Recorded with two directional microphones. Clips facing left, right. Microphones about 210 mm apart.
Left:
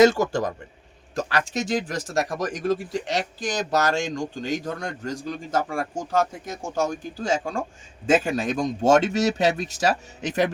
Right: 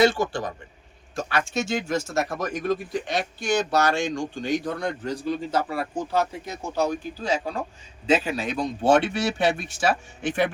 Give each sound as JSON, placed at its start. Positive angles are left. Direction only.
{"t": 0.0, "sound": "speech", "side_deg": 40}
{"t": 2.5, "sound": "speech", "side_deg": 90}
{"t": 3.9, "sound": "a man's voice", "side_deg": 40}